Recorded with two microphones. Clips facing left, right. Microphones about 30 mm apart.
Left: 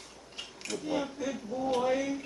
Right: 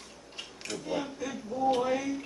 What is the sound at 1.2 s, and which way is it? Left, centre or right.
Speech, centre.